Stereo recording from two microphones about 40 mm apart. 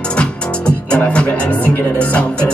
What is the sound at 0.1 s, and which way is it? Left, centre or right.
Music, left.